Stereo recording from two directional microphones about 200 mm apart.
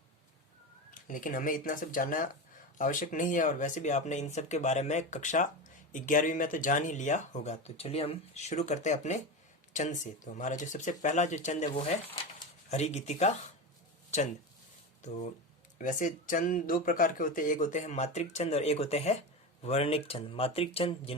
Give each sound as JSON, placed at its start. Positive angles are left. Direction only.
{"t": 0.9, "sound": "speech", "side_deg": 40}
{"t": 15.8, "sound": "speech", "side_deg": 40}